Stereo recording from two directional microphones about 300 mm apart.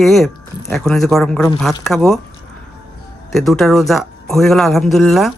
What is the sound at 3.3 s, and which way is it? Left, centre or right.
Speech, centre.